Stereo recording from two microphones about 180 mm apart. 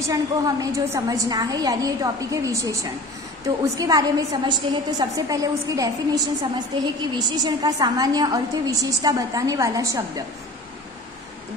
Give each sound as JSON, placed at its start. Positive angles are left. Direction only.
{"t": 0.0, "sound": "a woman's voice", "side_deg": -20}